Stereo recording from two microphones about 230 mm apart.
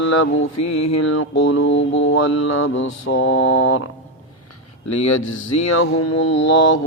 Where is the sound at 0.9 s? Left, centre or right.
Left.